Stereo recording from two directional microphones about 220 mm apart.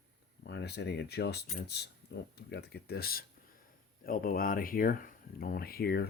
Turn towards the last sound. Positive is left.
turn(degrees=45)  # may be behind; listen again after turning